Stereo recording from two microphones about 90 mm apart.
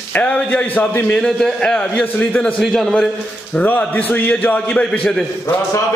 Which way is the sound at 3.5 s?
20° left (ahead or behind).